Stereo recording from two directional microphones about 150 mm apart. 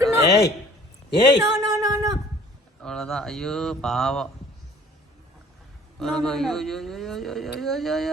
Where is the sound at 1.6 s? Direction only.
25° right (ahead or behind).